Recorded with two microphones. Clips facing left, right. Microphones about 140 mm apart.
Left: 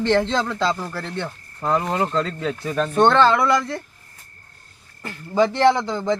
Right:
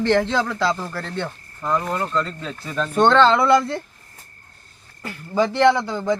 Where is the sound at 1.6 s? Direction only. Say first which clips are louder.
Left 2 dB; 65° left (ahead or behind).